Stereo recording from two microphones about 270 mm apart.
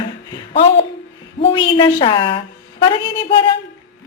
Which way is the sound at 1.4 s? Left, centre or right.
Centre.